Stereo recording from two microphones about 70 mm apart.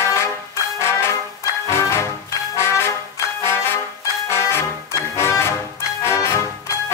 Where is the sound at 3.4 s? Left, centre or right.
Left.